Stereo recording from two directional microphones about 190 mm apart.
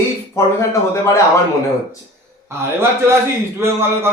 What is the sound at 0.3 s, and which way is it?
Speech, 15° left (ahead or behind).